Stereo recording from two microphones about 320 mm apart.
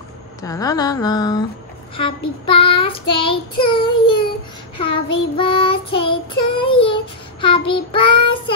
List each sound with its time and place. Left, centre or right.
0.4 s child singing: centre